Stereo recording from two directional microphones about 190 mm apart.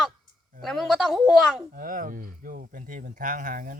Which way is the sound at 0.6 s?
Centre (ahead or behind).